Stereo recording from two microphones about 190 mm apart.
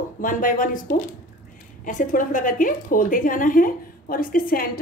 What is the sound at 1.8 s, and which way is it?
A woman's voice, 45° left (ahead or behind).